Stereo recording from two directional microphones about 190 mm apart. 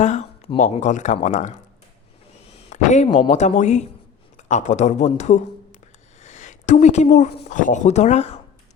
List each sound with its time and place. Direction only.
0.0 s speech: 35° left (ahead or behind)
2.6 s a sound: 40° left (ahead or behind)
3.2 s speech: 40° left (ahead or behind)